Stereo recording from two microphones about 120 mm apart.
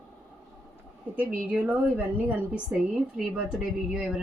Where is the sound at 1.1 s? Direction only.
10° right (ahead or behind).